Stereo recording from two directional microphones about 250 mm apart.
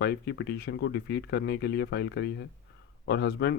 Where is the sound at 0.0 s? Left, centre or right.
Left.